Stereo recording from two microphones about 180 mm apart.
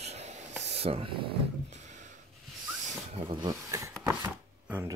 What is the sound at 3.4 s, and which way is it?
Speech, 20° right (ahead or behind).